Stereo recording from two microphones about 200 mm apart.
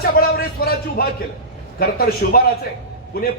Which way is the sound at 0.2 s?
50° left (ahead or behind).